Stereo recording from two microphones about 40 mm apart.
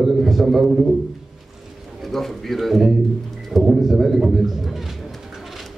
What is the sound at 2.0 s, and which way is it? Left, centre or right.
A man's voice, centre.